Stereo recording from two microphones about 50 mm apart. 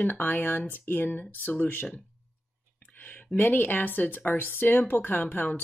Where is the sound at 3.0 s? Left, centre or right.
Left.